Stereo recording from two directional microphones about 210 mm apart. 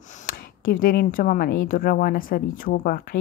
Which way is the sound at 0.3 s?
45° left (ahead or behind).